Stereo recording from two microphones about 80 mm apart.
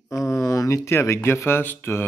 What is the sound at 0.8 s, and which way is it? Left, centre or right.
Speech, left.